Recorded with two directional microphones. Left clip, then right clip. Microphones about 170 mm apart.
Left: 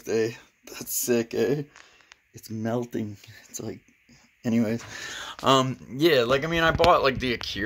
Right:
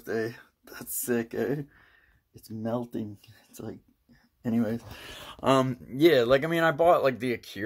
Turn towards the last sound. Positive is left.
turn(degrees=0)  # may be behind; listen again after turning